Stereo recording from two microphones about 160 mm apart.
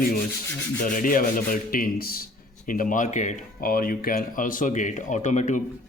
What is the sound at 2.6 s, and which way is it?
Speech, 55° left (ahead or behind).